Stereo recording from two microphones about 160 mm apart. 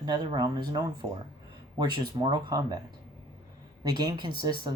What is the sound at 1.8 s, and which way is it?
Speech, 25° right (ahead or behind).